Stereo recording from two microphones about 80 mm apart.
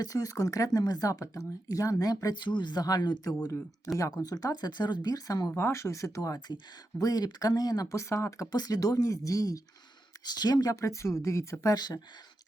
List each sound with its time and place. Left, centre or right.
0.0 s speech: left
2.3 s speech: left
2.8 s speech: left
5.5 s speech: left
7.0 s speech: left
7.9 s speech: left
8.5 s speech: left
10.2 s speech: left
11.7 s speech: left